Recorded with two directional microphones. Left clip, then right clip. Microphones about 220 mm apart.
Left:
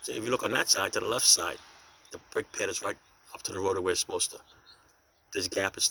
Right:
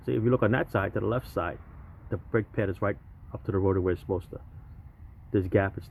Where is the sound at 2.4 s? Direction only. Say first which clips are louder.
Left 3 dB; 45° left (ahead or behind).